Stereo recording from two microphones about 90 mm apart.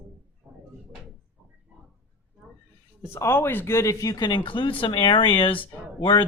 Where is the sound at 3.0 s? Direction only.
30° left (ahead or behind).